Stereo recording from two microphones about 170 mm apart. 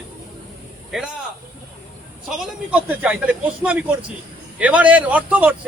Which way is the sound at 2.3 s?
5° right (ahead or behind).